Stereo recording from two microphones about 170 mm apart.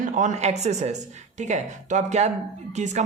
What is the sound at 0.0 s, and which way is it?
A woman's voice, 50° right (ahead or behind).